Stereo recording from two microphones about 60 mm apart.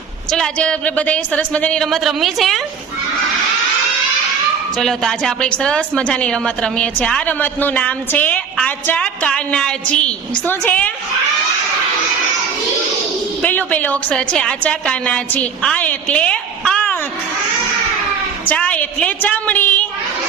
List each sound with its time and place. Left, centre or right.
0.3 s a woman's voice: centre
1.8 s a woman's voice: centre
4.8 s a woman's voice: centre
13.4 s a woman's voice: left
16.0 s a sound: centre
18.5 s a woman's voice: left